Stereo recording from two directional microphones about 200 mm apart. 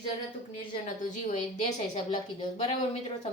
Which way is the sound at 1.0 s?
35° left (ahead or behind).